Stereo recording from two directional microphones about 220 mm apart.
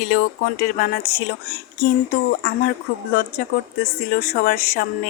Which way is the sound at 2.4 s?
45° left (ahead or behind).